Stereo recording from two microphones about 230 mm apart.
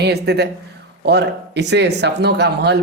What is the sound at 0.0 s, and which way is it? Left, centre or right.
Speech, right.